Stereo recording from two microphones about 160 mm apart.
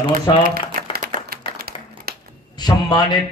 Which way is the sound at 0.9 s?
65° right (ahead or behind).